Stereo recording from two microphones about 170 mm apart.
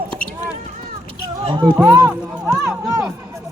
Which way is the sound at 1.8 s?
20° right (ahead or behind).